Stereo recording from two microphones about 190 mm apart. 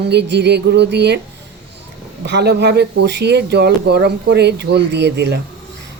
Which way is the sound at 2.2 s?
65° right (ahead or behind).